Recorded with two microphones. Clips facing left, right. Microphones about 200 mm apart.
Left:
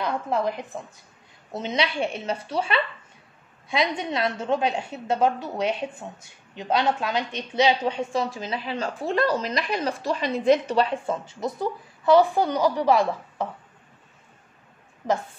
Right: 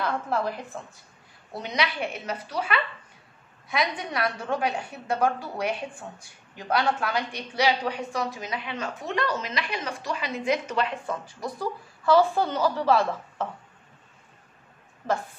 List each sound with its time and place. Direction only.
0.0 s a woman's voice: 15° left (ahead or behind)
15.0 s a woman's voice: 15° left (ahead or behind)